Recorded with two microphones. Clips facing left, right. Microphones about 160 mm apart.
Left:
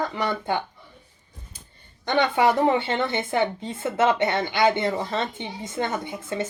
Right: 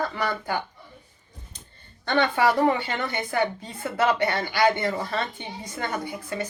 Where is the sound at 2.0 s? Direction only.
20° left (ahead or behind).